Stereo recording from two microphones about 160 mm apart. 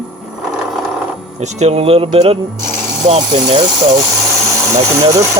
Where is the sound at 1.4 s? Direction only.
45° right (ahead or behind).